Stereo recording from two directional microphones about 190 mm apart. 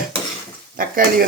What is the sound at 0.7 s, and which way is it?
Speech, 50° right (ahead or behind).